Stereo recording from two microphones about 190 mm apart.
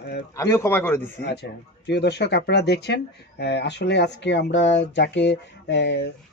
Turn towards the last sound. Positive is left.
turn(degrees=65)  # may be behind; listen again after turning